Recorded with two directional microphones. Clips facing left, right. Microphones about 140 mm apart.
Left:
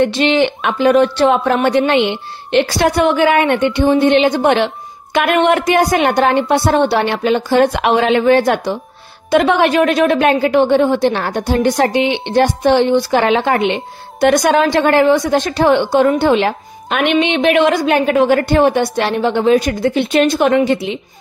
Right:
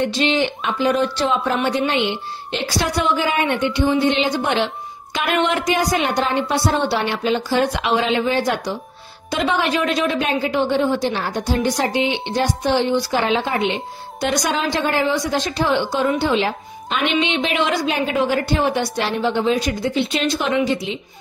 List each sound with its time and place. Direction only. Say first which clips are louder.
0.0 s a woman's voice: left 6 dB; 65° left (ahead or behind)